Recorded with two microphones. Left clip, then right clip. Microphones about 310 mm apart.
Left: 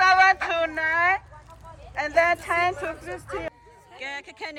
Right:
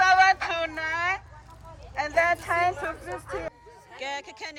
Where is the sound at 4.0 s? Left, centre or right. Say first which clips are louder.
Even; centre.